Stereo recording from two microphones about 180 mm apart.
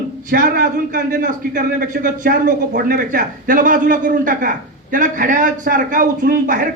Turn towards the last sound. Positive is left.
turn(degrees=-50)  # may be behind; listen again after turning